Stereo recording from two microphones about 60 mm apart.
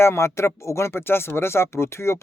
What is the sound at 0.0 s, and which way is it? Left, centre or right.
Speech, left.